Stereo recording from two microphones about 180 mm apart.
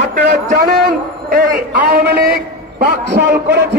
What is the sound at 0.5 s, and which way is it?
A man's voice, 55° right (ahead or behind).